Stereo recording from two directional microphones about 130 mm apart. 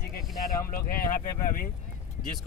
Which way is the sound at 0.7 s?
90° left.